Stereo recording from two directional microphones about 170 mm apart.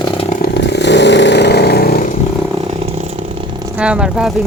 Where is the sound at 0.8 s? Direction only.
90° left; by 2.0 s 70° left (ahead or behind).